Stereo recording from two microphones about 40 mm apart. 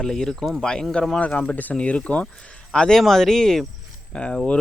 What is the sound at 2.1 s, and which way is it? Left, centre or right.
Speech, left.